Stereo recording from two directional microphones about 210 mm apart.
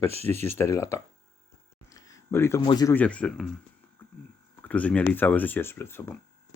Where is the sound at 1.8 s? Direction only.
15° left (ahead or behind).